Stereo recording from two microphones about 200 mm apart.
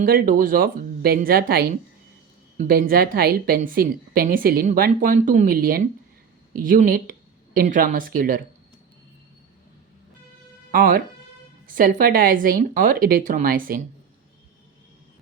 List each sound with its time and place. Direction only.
0.0 s a woman's voice: 45° right (ahead or behind)
10.7 s a woman's voice: 45° right (ahead or behind)